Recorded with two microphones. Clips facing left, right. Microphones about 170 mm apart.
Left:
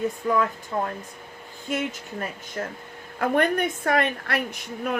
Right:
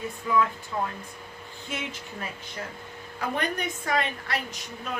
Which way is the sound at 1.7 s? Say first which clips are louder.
Left 7 dB; 45° left (ahead or behind).